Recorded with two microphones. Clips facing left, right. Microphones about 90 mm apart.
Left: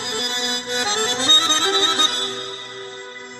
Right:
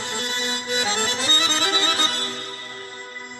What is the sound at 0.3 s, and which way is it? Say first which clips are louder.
Music: left 1 dB; 35° left (ahead or behind).